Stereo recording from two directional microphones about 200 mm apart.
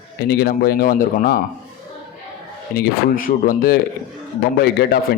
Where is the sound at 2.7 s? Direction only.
45° left (ahead or behind).